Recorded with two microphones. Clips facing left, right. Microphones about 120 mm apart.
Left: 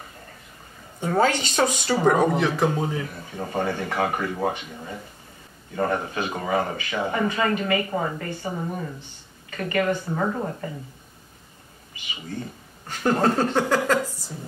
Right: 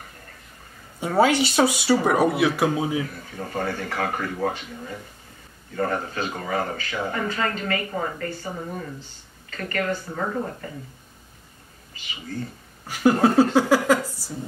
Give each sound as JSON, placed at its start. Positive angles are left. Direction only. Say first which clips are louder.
{"t": 1.0, "sound": "speech", "louder": "right 2 dB", "side_deg": -10}
{"t": 3.3, "sound": "speech", "louder": "left 2 dB", "side_deg": 20}
{"t": 9.5, "sound": "speech", "louder": "left 3 dB", "side_deg": 15}
{"t": 12.8, "sound": "speech", "louder": "right 3 dB", "side_deg": -10}